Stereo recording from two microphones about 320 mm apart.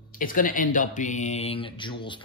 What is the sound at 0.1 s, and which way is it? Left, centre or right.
Speech, left.